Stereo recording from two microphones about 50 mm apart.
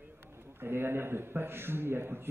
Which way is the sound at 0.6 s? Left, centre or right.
Right.